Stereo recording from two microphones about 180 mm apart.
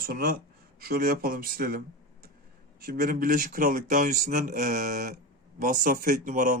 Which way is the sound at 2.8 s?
55° right (ahead or behind).